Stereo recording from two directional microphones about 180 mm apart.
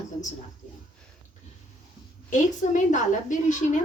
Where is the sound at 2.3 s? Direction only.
45° left (ahead or behind).